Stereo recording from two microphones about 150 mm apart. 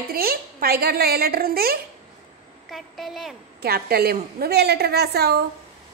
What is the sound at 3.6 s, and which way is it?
A woman's voice, 90° right.